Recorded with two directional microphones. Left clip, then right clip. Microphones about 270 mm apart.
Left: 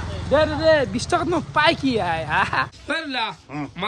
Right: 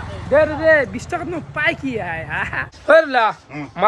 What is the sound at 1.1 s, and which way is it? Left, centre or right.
A man's voice, centre.